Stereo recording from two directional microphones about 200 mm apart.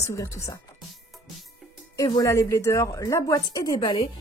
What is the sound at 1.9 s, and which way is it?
A woman's voice, 15° left (ahead or behind).